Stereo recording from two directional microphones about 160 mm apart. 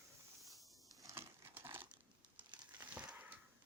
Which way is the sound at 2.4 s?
30° right (ahead or behind).